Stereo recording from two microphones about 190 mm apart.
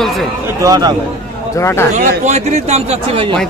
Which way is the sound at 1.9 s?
40° right (ahead or behind).